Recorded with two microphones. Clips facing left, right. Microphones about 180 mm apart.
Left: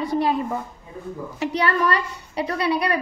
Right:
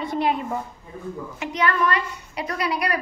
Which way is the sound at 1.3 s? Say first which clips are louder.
Left 2 dB; 35° left (ahead or behind).